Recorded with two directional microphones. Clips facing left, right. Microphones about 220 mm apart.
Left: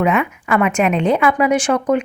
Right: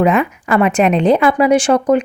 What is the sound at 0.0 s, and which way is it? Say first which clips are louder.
A woman's voice: right 3 dB; 35° right (ahead or behind).